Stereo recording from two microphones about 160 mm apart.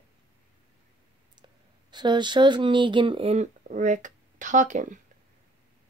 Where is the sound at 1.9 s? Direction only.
30° right (ahead or behind).